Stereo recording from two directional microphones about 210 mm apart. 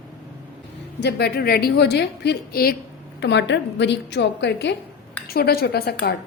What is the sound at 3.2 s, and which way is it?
A woman's voice, 55° left (ahead or behind).